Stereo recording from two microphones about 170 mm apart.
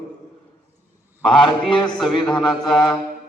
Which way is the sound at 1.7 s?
25° left (ahead or behind).